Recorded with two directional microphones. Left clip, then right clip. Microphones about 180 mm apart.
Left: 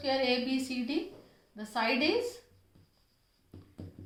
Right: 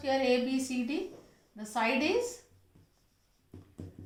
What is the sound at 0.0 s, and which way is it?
A woman's voice, 25° left (ahead or behind).